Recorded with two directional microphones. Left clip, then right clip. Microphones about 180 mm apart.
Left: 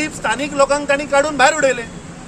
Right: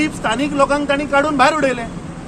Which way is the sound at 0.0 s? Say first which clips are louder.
Right 1 dB; 5° left (ahead or behind).